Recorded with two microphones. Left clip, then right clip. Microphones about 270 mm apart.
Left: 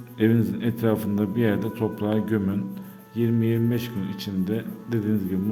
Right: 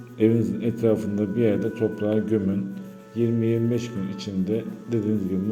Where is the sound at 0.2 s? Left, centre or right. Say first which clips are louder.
Right 2 dB; centre.